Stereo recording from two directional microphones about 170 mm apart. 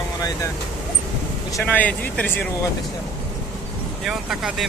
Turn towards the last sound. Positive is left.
turn(degrees=-5)  # may be behind; listen again after turning